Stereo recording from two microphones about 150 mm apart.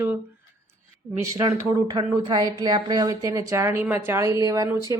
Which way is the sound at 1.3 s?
25° right (ahead or behind).